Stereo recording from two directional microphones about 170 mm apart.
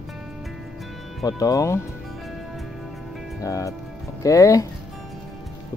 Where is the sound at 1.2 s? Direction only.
20° left (ahead or behind).